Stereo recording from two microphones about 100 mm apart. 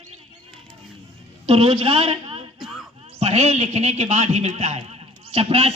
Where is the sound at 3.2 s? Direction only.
90° right.